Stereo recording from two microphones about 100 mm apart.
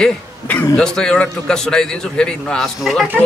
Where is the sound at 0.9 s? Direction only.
10° left (ahead or behind).